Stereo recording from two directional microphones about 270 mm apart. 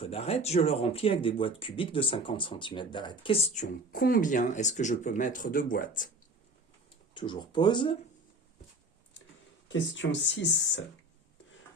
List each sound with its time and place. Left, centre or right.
0.0 s speech: left
7.1 s speech: centre
9.6 s speech: left